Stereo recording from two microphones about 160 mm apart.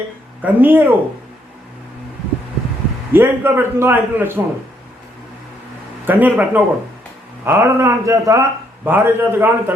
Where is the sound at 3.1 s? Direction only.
10° right (ahead or behind).